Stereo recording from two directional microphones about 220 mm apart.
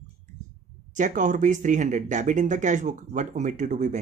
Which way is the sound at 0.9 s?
35° right (ahead or behind).